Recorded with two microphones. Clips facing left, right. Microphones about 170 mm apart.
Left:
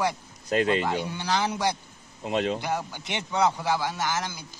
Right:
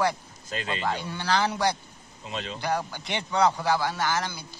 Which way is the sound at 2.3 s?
60° left (ahead or behind).